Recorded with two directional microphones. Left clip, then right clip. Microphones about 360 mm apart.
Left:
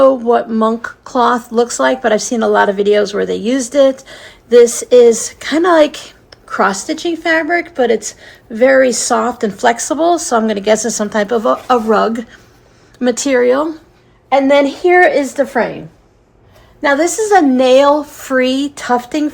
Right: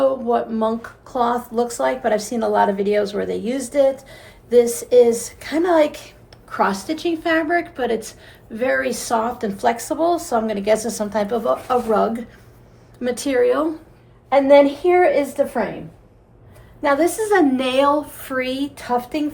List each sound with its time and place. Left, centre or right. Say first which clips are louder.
0.0 s speech: left 8 dB; left
14.3 s speech: left 2 dB; left
16.8 s a woman's voice: left 5 dB; centre